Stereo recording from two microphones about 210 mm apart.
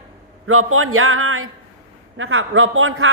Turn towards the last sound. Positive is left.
turn(degrees=-75)  # may be behind; listen again after turning